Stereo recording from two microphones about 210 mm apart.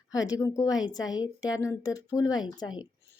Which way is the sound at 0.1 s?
15° left (ahead or behind).